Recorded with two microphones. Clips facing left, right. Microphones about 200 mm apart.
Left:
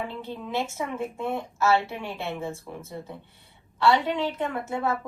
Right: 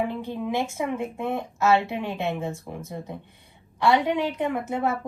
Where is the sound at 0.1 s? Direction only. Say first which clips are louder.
Right 4 dB; 15° right (ahead or behind).